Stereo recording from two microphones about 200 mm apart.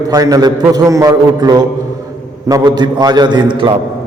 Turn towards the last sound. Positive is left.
turn(degrees=-20)  # may be behind; listen again after turning